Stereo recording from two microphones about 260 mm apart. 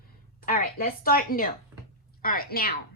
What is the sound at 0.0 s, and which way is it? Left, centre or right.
A woman's voice, left.